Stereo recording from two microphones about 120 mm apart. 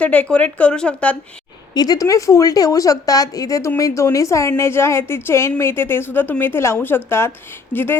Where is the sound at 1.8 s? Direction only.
30° left (ahead or behind).